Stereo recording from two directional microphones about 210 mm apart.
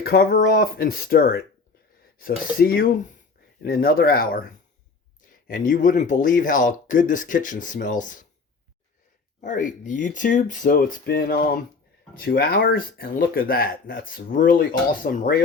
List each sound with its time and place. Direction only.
0.0 s speech: 45° left (ahead or behind)
5.5 s speech: 40° left (ahead or behind)
9.4 s speech: 35° left (ahead or behind)